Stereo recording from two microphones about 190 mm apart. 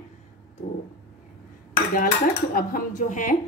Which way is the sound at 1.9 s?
50° left (ahead or behind).